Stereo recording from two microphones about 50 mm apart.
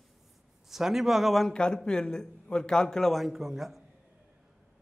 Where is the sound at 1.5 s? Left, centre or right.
Centre.